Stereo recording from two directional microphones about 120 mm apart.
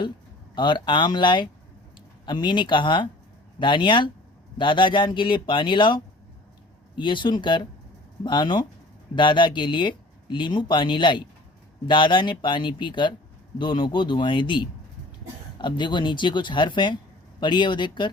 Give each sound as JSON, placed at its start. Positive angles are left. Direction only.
{"t": 0.5, "sound": "speech", "side_deg": 40}